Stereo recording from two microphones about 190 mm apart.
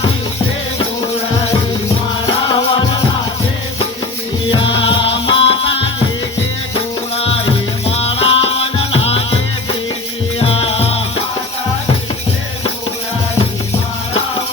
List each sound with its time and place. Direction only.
2.2 s music: 25° left (ahead or behind)
4.5 s music: 25° left (ahead or behind)
7.2 s music: 30° left (ahead or behind)
10.4 s music: 30° left (ahead or behind)